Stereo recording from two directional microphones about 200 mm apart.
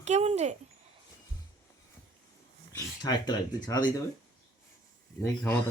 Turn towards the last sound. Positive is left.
turn(degrees=15)  # may be behind; listen again after turning